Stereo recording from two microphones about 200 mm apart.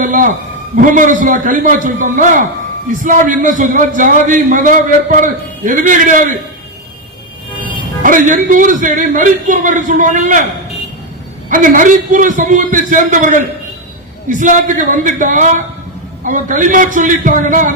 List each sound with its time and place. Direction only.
0.0 s a sound: 40° right (ahead or behind)
0.8 s a man's voice: 40° right (ahead or behind)
8.0 s a man's voice: 40° right (ahead or behind)
11.4 s a man's voice: 40° right (ahead or behind)